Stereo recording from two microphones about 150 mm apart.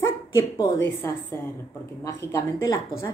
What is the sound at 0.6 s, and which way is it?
A woman's voice, 15° left (ahead or behind).